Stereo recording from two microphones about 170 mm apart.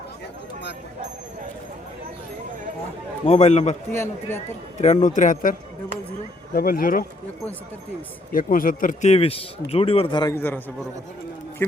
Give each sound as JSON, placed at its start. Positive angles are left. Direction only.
{"t": 3.2, "sound": "speech", "side_deg": 40}
{"t": 3.9, "sound": "a man's voice", "side_deg": 15}
{"t": 4.8, "sound": "speech", "side_deg": 40}
{"t": 8.3, "sound": "speech", "side_deg": 55}
{"t": 10.3, "sound": "a man's voice", "side_deg": 10}